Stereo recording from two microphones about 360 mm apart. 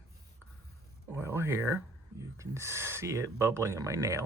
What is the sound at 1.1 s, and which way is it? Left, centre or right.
Speech, centre.